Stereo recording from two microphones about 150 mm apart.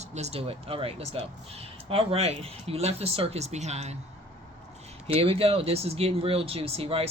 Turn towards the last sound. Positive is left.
turn(degrees=-40)  # may be behind; listen again after turning